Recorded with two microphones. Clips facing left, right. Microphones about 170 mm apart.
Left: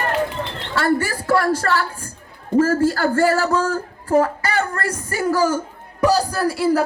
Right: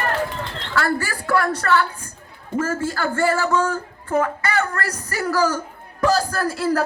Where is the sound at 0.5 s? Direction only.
25° left (ahead or behind).